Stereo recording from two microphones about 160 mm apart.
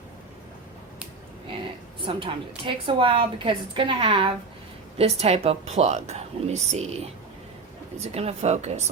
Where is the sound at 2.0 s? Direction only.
30° right (ahead or behind).